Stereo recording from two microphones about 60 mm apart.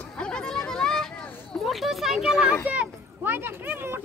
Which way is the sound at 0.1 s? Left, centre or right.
Centre.